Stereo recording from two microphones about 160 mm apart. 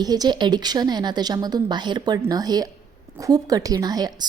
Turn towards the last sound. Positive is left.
turn(degrees=-25)  # may be behind; listen again after turning